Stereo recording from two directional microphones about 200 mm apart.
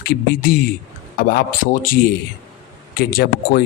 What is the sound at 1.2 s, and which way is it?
Speech, 45° left (ahead or behind).